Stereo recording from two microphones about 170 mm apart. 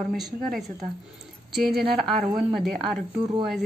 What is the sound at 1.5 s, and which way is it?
A woman's voice, centre (ahead or behind).